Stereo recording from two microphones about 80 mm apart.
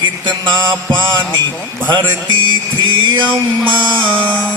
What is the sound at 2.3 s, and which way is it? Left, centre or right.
Music, right.